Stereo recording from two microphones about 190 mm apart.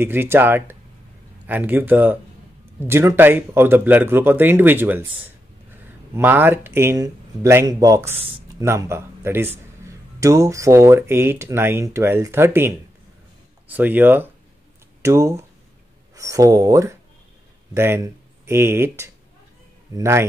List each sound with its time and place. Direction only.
0.0 s a man's voice: 10° right (ahead or behind)
8.2 s a sound: 30° right (ahead or behind)
8.5 s a man's voice: 15° right (ahead or behind)